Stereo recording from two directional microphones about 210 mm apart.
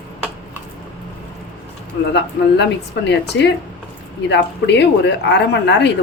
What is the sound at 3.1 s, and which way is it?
Speech, 55° left (ahead or behind).